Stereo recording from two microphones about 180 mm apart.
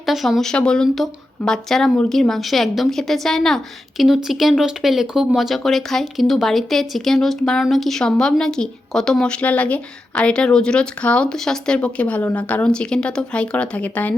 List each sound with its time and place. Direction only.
0.0 s a woman's voice: centre (ahead or behind)